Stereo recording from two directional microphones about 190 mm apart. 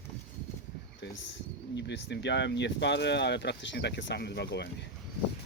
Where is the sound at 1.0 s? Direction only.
65° left (ahead or behind).